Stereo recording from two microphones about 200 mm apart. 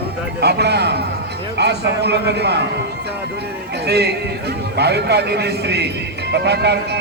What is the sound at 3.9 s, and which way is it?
A man's voice, 55° right (ahead or behind).